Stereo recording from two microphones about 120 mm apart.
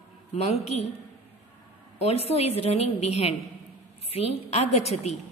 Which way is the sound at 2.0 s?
60° left (ahead or behind).